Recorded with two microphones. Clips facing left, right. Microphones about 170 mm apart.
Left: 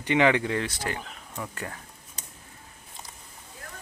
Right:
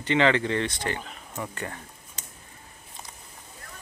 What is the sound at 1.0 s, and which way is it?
Speech, 5° right (ahead or behind).